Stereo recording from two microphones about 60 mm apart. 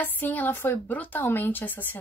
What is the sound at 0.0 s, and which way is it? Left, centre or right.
Speech, left.